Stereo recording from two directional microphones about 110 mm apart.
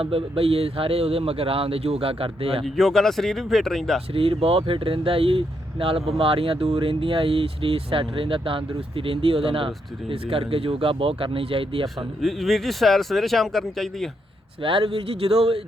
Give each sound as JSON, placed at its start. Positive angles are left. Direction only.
{"t": 0.0, "sound": "speech", "side_deg": -60}
{"t": 2.6, "sound": "speech", "side_deg": 0}
{"t": 4.1, "sound": "speech", "side_deg": -55}
{"t": 12.2, "sound": "speech", "side_deg": 0}
{"t": 14.6, "sound": "speech", "side_deg": -50}